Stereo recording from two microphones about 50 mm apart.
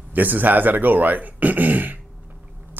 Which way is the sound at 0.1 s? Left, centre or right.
Right.